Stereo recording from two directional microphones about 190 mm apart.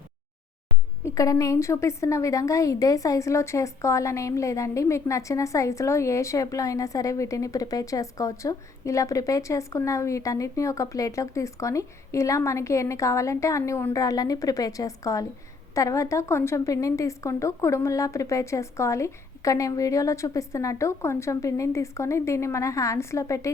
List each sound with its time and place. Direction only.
1.0 s a woman's voice: 15° left (ahead or behind)